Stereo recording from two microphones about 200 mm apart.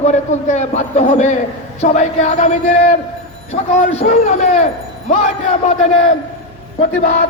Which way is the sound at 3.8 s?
35° left (ahead or behind).